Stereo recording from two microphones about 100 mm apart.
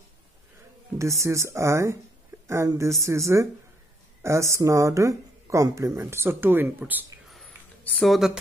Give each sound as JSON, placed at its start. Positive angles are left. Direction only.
{"t": 1.2, "sound": "a woman's voice", "side_deg": -30}
{"t": 7.4, "sound": "a sound", "side_deg": 15}
{"t": 8.0, "sound": "speech", "side_deg": 0}